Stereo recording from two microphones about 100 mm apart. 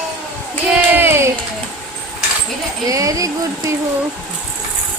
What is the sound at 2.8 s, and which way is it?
Speech, 35° right (ahead or behind).